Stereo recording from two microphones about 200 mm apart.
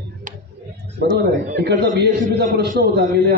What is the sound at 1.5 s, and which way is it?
A man's voice, 55° right (ahead or behind).